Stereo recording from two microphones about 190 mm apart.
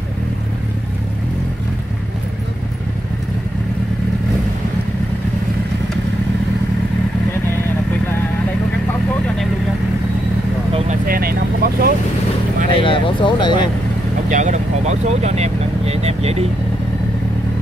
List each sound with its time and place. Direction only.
11.1 s vehicle: 50° right (ahead or behind)
12.7 s a sound: 25° left (ahead or behind)
14.3 s vehicle: 40° right (ahead or behind)